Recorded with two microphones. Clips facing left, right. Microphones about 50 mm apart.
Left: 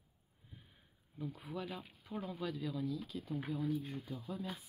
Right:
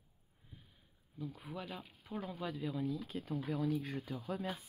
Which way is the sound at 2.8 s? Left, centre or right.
Right.